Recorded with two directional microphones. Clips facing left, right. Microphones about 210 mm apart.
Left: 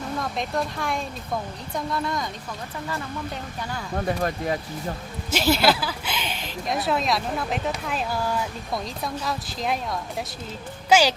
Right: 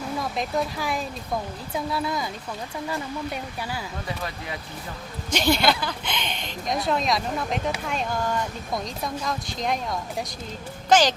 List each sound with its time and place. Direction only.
0.1 s speech: centre (ahead or behind)
3.9 s speech: 50° left (ahead or behind)
5.3 s speech: 5° left (ahead or behind)